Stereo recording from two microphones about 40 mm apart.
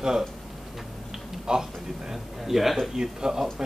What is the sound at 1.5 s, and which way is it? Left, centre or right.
Speech, centre.